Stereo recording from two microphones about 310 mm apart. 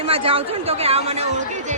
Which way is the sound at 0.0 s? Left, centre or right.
Centre.